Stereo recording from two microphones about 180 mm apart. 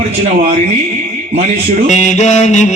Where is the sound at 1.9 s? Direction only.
40° left (ahead or behind).